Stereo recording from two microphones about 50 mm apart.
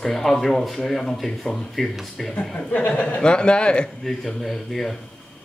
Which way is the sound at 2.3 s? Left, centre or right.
Left.